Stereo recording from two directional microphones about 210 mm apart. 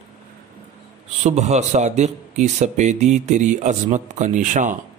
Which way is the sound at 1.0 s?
35° right (ahead or behind).